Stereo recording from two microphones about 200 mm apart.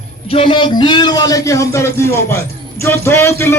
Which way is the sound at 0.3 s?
25° left (ahead or behind).